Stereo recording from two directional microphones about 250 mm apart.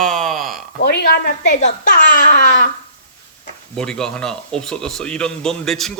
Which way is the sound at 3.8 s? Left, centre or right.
Centre.